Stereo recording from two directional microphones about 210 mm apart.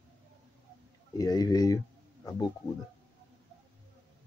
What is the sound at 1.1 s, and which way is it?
Speech, 20° left (ahead or behind).